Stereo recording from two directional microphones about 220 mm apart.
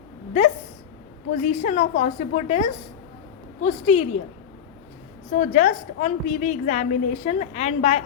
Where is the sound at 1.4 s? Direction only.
35° left (ahead or behind).